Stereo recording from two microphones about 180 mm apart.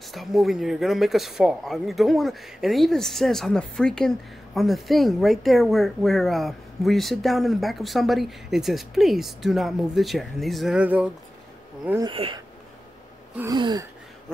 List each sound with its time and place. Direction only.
0.1 s speech: centre (ahead or behind)
12.0 s gasp: 30° right (ahead or behind)
13.4 s gasp: 20° right (ahead or behind)